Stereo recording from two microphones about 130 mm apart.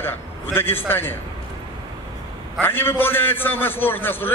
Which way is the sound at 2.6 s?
15° left (ahead or behind).